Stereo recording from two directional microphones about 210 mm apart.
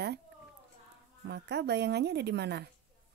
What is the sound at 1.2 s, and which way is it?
Speech, 55° right (ahead or behind).